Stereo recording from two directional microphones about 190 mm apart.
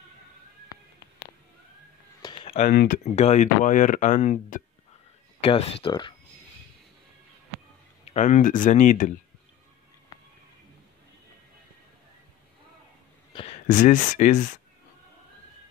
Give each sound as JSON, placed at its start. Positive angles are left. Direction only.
{"t": 0.7, "sound": "music", "side_deg": 20}
{"t": 2.2, "sound": "a sound", "side_deg": 30}
{"t": 3.2, "sound": "speech", "side_deg": 40}
{"t": 5.4, "sound": "speech", "side_deg": 30}
{"t": 8.0, "sound": "speech", "side_deg": 35}
{"t": 13.3, "sound": "a sound", "side_deg": 25}
{"t": 13.7, "sound": "speech", "side_deg": 40}